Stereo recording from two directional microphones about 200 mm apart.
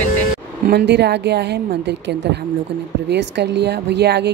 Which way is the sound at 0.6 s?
55° right (ahead or behind).